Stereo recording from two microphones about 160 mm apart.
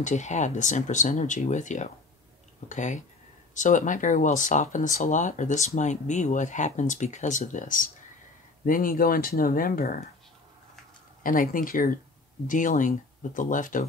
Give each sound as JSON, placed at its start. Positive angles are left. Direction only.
{"t": 0.0, "sound": "speech", "side_deg": 45}
{"t": 11.2, "sound": "speech", "side_deg": 60}